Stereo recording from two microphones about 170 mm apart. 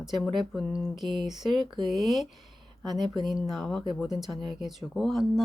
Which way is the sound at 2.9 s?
25° right (ahead or behind).